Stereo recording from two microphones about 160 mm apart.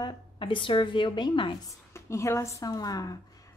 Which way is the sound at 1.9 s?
15° left (ahead or behind).